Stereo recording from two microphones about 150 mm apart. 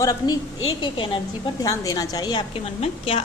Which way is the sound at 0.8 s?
35° left (ahead or behind).